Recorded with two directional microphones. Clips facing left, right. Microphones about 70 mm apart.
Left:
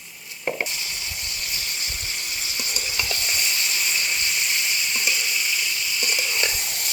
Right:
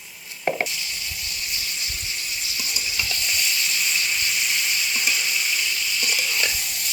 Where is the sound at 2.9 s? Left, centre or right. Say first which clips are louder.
Even; left.